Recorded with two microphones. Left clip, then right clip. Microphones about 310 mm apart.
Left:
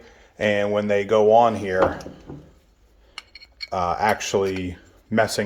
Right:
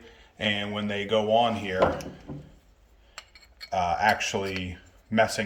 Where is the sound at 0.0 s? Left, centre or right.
Centre.